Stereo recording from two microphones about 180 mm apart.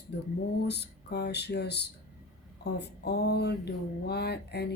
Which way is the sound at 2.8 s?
65° left (ahead or behind).